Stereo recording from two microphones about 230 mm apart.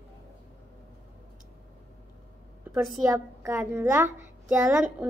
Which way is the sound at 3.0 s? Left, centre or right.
Centre.